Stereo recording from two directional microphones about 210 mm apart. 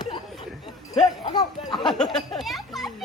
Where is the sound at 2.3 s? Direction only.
Centre (ahead or behind).